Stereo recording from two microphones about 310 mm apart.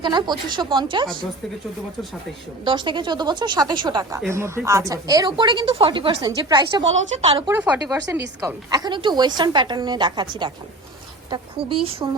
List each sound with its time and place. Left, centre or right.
0.0 s a woman's voice: centre
2.6 s a woman's voice: centre
7.5 s a woman's voice: centre